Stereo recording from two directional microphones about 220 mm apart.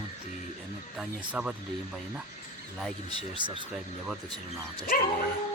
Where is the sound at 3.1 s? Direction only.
20° right (ahead or behind).